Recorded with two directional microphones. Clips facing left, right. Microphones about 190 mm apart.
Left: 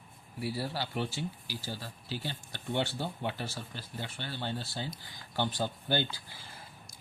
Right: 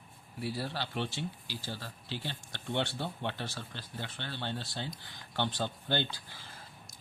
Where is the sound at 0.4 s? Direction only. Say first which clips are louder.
Left 1 dB; 5° left (ahead or behind).